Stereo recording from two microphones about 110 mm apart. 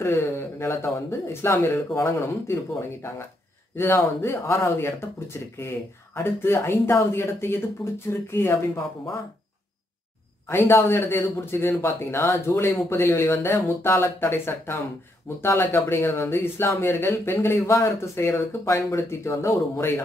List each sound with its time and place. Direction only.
0.0 s speech: 25° left (ahead or behind)
10.5 s speech: 25° left (ahead or behind)